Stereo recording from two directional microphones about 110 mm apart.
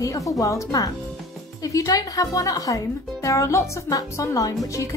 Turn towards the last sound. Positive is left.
turn(degrees=30)  # may be behind; listen again after turning